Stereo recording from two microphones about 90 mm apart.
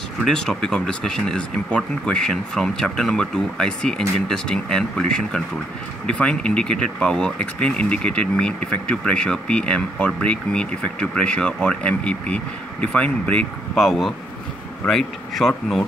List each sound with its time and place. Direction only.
0.2 s speech: 5° left (ahead or behind)
13.7 s speech: centre (ahead or behind)